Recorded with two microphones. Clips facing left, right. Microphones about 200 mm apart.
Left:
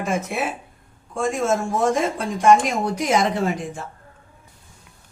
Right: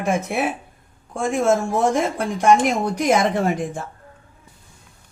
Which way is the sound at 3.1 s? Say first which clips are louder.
Right 1 dB; 55° right (ahead or behind).